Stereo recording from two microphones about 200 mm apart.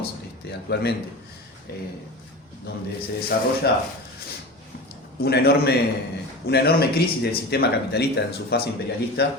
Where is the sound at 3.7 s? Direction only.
50° left (ahead or behind).